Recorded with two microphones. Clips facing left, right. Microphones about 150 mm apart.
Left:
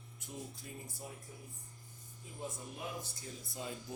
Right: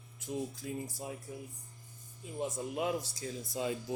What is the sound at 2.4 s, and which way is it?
Speech, 90° right.